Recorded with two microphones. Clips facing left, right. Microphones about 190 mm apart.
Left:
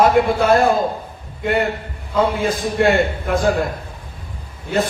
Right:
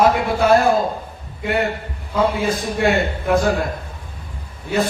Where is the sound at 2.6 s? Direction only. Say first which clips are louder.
Left 5 dB; 55° left (ahead or behind).